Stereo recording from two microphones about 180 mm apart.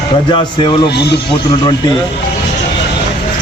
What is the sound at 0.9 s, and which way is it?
Speech, 65° left (ahead or behind).